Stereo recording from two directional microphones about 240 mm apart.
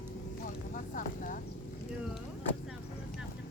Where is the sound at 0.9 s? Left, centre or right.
Left.